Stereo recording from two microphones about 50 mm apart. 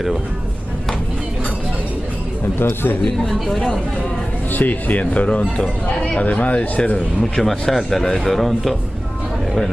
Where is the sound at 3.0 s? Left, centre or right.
Centre.